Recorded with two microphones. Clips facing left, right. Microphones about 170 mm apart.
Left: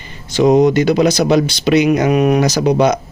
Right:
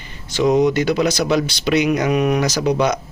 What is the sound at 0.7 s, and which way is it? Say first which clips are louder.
Speech: left 5 dB; 15° left (ahead or behind).